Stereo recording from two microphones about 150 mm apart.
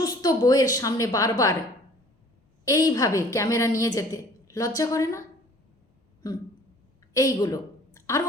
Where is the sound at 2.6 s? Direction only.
20° left (ahead or behind).